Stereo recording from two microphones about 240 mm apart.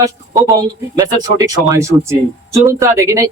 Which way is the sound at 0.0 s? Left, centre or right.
Centre.